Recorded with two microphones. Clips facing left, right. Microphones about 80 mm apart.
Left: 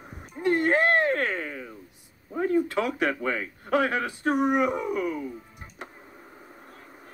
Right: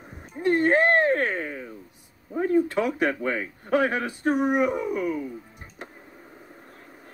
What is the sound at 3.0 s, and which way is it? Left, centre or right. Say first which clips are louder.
A man's voice: right 2 dB; right.